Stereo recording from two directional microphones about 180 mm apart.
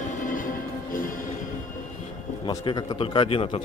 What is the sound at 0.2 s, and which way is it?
Music, 45° left (ahead or behind).